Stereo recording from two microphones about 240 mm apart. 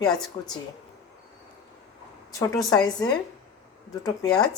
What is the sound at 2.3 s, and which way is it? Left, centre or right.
Speech, centre.